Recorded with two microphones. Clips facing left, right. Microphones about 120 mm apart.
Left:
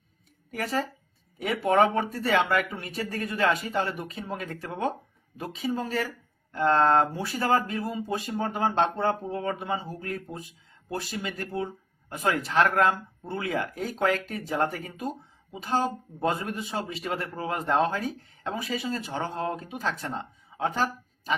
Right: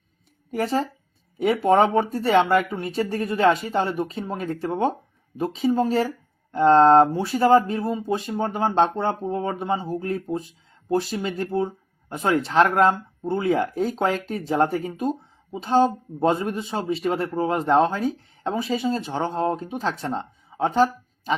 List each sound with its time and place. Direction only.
0.5 s speech: 25° right (ahead or behind)